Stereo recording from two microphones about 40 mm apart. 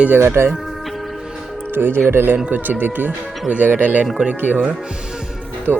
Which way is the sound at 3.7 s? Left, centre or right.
Right.